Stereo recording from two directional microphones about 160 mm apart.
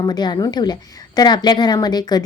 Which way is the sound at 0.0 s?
25° left (ahead or behind).